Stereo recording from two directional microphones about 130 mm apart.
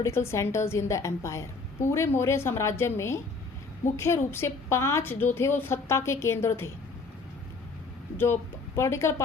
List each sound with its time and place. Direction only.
0.0 s a woman's voice: 20° left (ahead or behind)
8.2 s a woman's voice: 20° left (ahead or behind)